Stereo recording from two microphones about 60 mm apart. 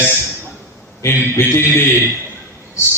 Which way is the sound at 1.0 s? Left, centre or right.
Left.